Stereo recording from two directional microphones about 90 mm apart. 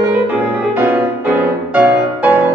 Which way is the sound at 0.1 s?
20° right (ahead or behind).